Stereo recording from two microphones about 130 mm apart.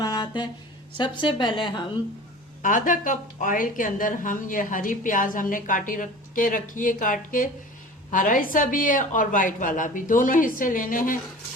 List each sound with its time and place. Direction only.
0.0 s a sound: 35° left (ahead or behind)
0.9 s a woman's voice: 35° left (ahead or behind)
2.6 s a woman's voice: 90° left